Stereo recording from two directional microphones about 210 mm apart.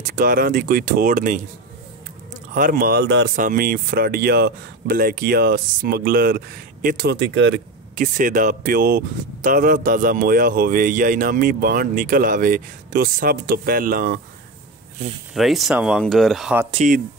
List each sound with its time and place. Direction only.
0.0 s speech: 40° right (ahead or behind)
2.5 s speech: 40° right (ahead or behind)
3.3 s speech: 40° right (ahead or behind); by 7.6 s 60° right (ahead or behind)
7.9 s speech: 40° right (ahead or behind)
15.3 s speech: centre (ahead or behind)
16.7 s speech: 35° right (ahead or behind)